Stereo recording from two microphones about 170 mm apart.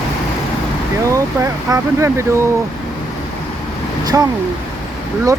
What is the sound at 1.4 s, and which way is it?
Speech, 15° right (ahead or behind).